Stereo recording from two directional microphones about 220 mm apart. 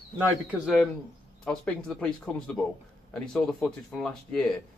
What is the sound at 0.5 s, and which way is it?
Speech, centre (ahead or behind).